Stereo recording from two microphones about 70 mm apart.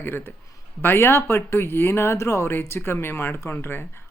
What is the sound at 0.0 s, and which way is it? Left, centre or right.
Speech, left.